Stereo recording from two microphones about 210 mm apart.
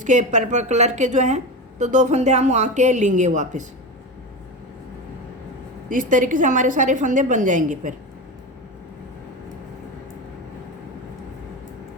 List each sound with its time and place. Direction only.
0.0 s a woman's voice: 35° right (ahead or behind)
5.9 s a woman's voice: 40° right (ahead or behind)